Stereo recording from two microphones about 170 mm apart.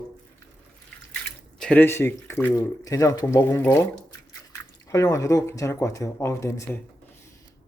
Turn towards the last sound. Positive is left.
turn(degrees=15)  # may be behind; listen again after turning